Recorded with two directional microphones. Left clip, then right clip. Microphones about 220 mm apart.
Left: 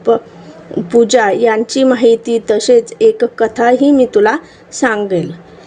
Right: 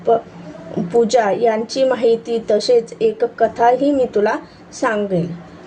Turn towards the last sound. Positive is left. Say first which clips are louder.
# left 5 dB
turn(degrees=40)  # may be behind; listen again after turning